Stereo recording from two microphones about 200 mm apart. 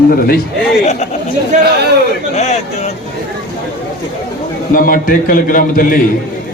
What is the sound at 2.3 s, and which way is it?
Speech, 35° left (ahead or behind).